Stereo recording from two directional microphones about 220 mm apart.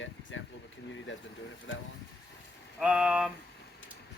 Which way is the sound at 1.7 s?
60° left (ahead or behind).